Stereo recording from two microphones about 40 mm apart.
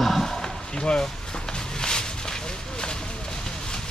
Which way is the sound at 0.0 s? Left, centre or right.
Centre.